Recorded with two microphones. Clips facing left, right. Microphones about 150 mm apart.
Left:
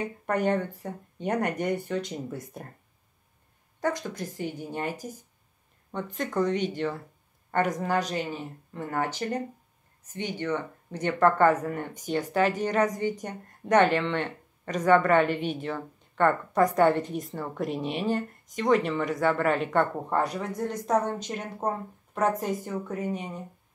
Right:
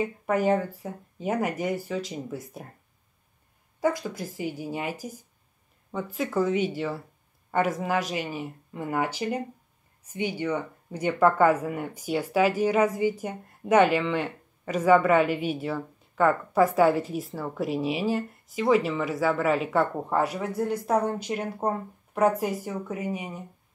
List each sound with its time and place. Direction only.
0.0 s speech: 5° right (ahead or behind)
3.8 s speech: 5° right (ahead or behind)